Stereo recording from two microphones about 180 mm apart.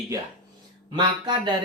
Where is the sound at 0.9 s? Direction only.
25° right (ahead or behind).